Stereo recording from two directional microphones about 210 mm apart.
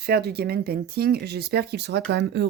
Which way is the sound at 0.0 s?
50° right (ahead or behind).